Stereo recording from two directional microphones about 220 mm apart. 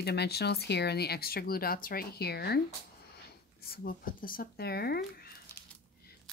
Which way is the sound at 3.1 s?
45° left (ahead or behind).